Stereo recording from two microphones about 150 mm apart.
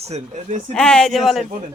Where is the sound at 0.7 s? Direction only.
5° left (ahead or behind).